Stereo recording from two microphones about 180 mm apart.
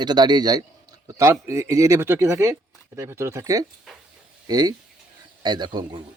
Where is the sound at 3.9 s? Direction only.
Centre (ahead or behind).